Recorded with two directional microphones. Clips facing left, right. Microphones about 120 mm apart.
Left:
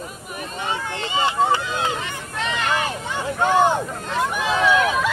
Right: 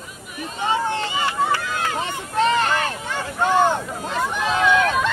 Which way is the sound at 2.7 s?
15° left (ahead or behind).